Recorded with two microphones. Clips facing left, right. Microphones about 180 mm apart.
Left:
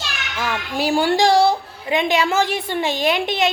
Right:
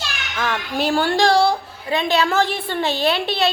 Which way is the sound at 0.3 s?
10° left (ahead or behind).